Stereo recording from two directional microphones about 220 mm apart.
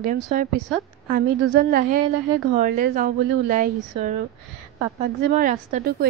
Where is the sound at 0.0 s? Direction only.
40° right (ahead or behind).